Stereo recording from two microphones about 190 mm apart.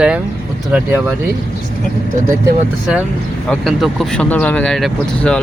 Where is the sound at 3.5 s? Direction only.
Centre (ahead or behind).